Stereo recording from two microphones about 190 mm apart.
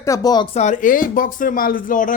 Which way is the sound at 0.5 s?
40° left (ahead or behind).